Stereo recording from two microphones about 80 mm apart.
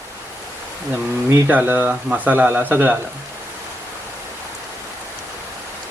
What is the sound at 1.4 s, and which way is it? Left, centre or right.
Speech, right.